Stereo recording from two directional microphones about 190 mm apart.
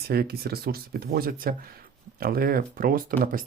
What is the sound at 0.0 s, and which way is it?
Speech, 55° right (ahead or behind).